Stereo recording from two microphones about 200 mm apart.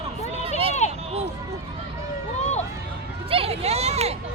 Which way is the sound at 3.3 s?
30° right (ahead or behind).